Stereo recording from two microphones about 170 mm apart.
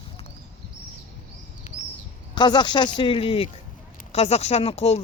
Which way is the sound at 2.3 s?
25° left (ahead or behind).